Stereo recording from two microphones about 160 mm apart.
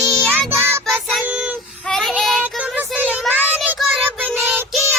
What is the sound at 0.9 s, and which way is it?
Child singing, 5° right (ahead or behind).